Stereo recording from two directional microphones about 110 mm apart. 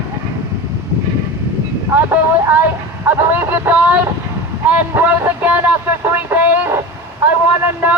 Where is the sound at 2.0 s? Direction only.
20° right (ahead or behind).